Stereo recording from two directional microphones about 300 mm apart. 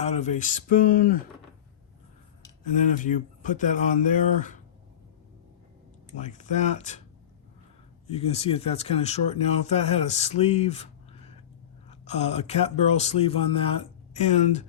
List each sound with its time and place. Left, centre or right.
0.0 s speech: left
2.6 s speech: left
6.1 s speech: left
8.0 s speech: centre
11.9 s speech: left